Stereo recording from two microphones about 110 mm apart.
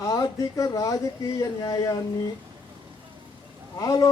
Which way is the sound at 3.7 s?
35° left (ahead or behind).